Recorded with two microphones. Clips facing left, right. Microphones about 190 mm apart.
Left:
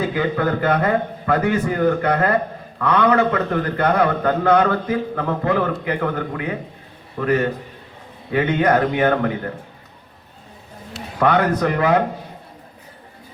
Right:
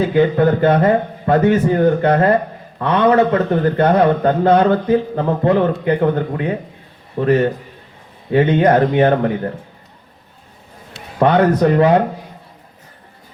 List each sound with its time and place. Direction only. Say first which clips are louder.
0.2 s speech: right 9 dB; 25° right (ahead or behind)
11.2 s speech: right 5 dB; 25° right (ahead or behind)